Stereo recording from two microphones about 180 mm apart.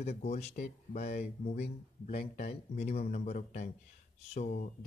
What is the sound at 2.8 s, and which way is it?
Speech, 35° left (ahead or behind).